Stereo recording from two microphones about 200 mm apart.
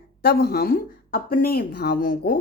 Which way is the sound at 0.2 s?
50° left (ahead or behind).